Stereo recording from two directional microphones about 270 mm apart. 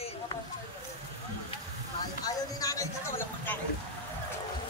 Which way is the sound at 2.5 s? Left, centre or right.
Centre.